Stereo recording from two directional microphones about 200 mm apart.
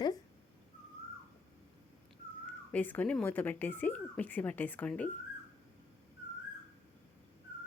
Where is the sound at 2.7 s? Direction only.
10° left (ahead or behind).